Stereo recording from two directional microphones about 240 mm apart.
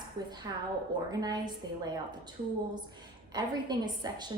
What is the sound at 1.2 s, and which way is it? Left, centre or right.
Speech, centre.